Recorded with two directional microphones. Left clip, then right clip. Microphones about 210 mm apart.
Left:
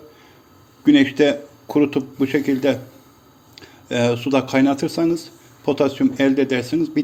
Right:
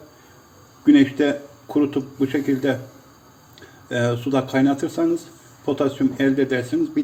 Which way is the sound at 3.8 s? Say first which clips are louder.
Left 3 dB; 35° left (ahead or behind).